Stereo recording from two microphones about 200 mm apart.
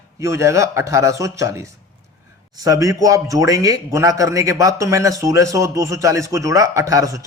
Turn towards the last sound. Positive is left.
turn(degrees=-15)  # may be behind; listen again after turning